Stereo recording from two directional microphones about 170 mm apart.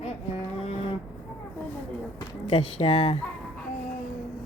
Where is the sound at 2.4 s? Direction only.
35° left (ahead or behind).